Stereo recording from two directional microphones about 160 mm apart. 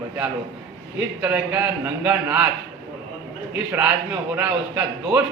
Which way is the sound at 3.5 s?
5° right (ahead or behind).